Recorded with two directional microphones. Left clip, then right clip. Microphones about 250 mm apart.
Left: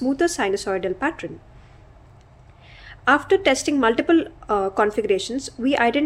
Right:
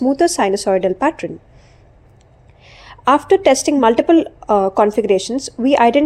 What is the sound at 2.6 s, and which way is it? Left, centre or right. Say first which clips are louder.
A woman's voice: right 5 dB; right.